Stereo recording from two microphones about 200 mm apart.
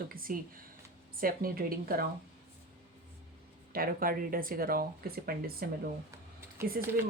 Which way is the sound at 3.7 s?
45° right (ahead or behind).